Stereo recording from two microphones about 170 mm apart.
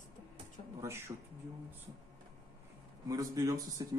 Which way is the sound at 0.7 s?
15° right (ahead or behind).